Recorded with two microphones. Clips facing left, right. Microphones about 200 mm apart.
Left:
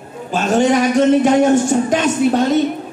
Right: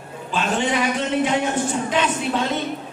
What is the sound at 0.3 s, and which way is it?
A woman's voice, 45° left (ahead or behind).